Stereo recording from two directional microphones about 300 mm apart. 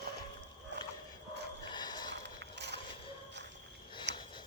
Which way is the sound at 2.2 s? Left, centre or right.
Right.